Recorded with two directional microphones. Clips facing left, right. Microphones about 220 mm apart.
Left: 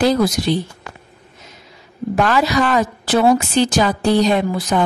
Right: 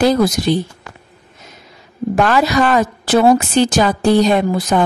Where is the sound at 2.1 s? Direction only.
50° right (ahead or behind).